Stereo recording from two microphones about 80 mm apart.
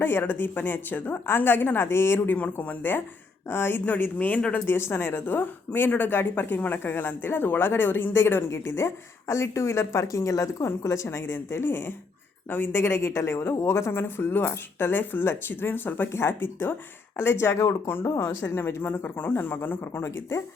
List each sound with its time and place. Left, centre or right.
0.0 s speech: left
4.6 s a woman's voice: left